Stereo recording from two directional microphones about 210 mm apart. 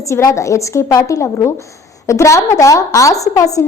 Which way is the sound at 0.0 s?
15° left (ahead or behind).